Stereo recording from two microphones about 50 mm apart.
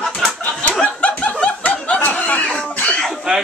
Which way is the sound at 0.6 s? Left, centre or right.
Left.